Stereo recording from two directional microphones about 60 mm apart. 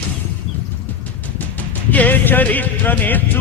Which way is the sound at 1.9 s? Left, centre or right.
Left.